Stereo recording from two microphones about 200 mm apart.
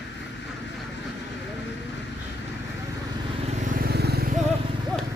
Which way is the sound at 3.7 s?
50° right (ahead or behind).